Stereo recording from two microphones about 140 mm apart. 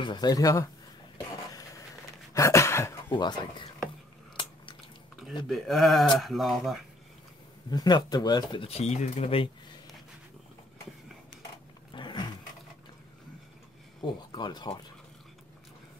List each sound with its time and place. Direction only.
0.0 s speech: 30° left (ahead or behind)
2.3 s a sound: 20° left (ahead or behind)
3.1 s speech: 35° left (ahead or behind)
5.5 s speech: centre (ahead or behind)
7.7 s speech: 30° left (ahead or behind)
8.6 s speech: 50° left (ahead or behind)
11.9 s roaring cats: 35° left (ahead or behind)
14.0 s speech: 35° left (ahead or behind)